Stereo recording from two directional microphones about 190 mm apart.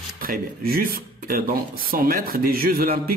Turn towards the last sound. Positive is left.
turn(degrees=-50)  # may be behind; listen again after turning